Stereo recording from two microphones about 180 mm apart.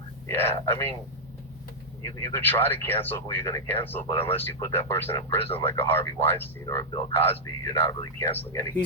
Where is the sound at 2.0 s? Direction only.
15° left (ahead or behind).